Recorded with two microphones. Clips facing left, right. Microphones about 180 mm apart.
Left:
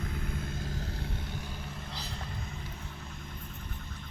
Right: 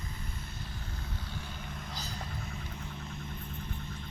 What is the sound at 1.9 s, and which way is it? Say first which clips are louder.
Vehicle: even; 30° left (ahead or behind).